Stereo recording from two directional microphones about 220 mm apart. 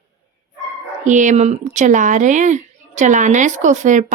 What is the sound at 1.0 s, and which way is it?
Speech, 35° right (ahead or behind).